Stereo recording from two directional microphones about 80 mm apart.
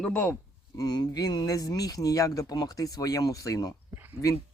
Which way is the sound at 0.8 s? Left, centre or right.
Left.